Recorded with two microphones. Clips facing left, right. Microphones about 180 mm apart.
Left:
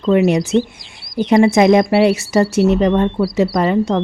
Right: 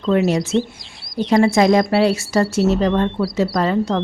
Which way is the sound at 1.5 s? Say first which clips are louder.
Left 3 dB; 20° left (ahead or behind).